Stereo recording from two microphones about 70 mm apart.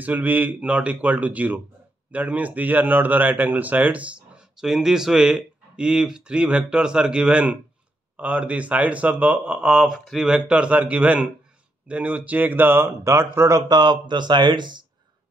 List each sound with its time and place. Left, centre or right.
0.0 s speech: right
4.6 s speech: centre; by 13.6 s right
13.6 s speech: right